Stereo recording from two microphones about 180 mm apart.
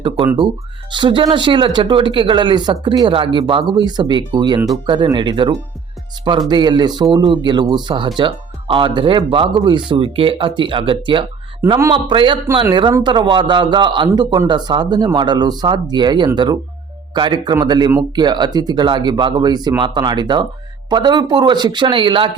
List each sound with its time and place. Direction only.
0.3 s a man's voice: 25° right (ahead or behind)